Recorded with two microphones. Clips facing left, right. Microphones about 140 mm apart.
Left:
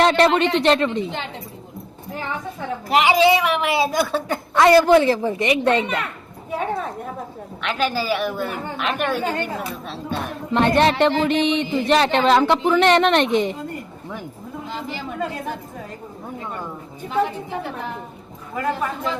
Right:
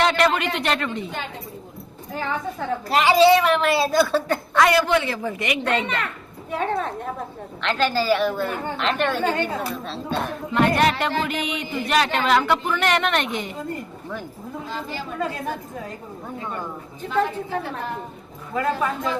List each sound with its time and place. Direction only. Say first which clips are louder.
0.0 s speech: left 4 dB; 30° left (ahead or behind)
2.9 s a woman's voice: right 1 dB; 15° left (ahead or behind)
4.7 s speech: left 7 dB; 35° left (ahead or behind)
5.8 s a woman's voice: left 2 dB; 5° left (ahead or behind)
10.5 s speech: left 2 dB; 25° left (ahead or behind)
14.7 s a woman's voice: left 2 dB; 20° left (ahead or behind)
17.1 s a woman's voice: left 1 dB; 15° left (ahead or behind)